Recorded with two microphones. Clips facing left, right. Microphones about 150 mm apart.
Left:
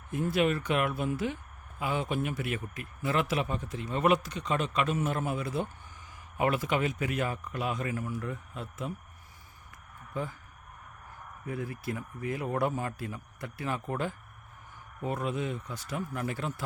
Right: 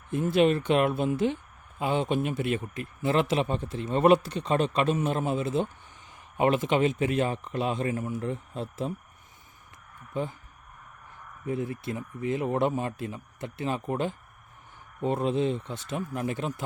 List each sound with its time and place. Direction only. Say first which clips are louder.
0.1 s speech: right 5 dB; 25° right (ahead or behind)
10.1 s speech: right 4 dB; 20° right (ahead or behind)
11.4 s speech: right 5 dB; 25° right (ahead or behind)